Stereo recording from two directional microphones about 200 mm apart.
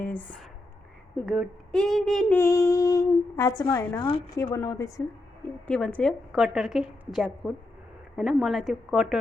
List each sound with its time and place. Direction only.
1.2 s a woman's voice: centre (ahead or behind)
2.4 s speech: 15° left (ahead or behind)
5.6 s a woman's voice: 5° left (ahead or behind)